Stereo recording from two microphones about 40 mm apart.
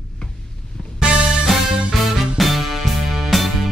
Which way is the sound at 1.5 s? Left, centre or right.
Centre.